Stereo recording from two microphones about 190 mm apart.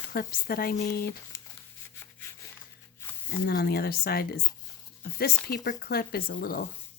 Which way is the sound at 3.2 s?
55° left (ahead or behind).